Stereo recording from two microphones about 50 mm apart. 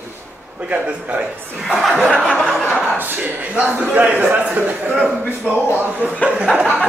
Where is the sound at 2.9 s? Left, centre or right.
Right.